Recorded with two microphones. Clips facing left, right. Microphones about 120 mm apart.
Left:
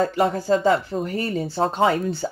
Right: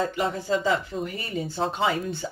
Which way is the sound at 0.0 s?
45° left (ahead or behind).